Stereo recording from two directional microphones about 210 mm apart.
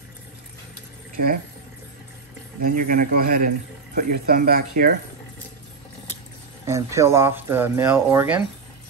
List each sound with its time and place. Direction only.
1.1 s speech: 40° right (ahead or behind)
2.6 s a man's voice: 40° right (ahead or behind)
6.6 s speech: 15° right (ahead or behind)